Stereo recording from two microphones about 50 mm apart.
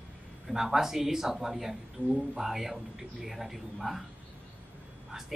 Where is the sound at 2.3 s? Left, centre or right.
Centre.